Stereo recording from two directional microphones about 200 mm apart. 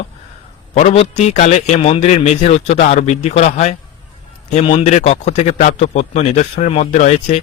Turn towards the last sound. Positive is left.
turn(degrees=35)  # may be behind; listen again after turning